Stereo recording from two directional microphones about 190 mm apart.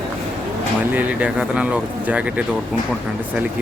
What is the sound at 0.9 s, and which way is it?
Speech, 5° right (ahead or behind).